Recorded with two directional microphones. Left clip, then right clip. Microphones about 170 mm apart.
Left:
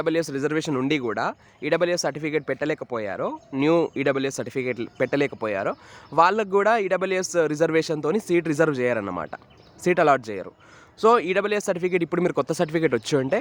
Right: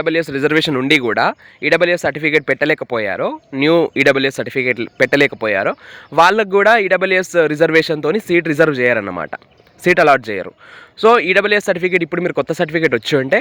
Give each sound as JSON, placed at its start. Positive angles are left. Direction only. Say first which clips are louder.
{"t": 0.0, "sound": "speech", "louder": "right 7 dB", "side_deg": -10}
{"t": 0.3, "sound": "speech", "louder": "right 10 dB", "side_deg": -25}
{"t": 4.4, "sound": "speech", "louder": "right 10 dB", "side_deg": -15}